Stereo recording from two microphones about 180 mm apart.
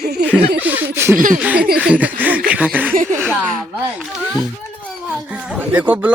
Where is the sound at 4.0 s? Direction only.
Centre (ahead or behind).